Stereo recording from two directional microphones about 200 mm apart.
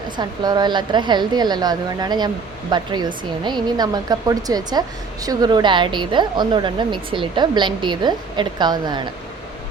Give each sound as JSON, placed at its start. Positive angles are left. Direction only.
{"t": 0.2, "sound": "a woman's voice", "side_deg": -20}